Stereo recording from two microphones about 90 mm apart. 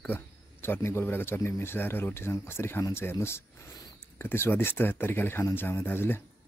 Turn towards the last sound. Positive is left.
turn(degrees=25)  # may be behind; listen again after turning